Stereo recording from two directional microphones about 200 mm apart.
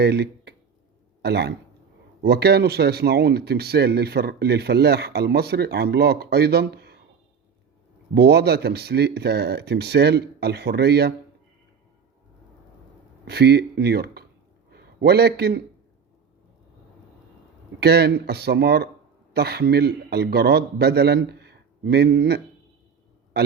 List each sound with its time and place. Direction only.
0.0 s speech: 55° right (ahead or behind)
8.1 s speech: 55° right (ahead or behind)
13.2 s a man's voice: 55° right (ahead or behind)
17.7 s speech: 55° right (ahead or behind)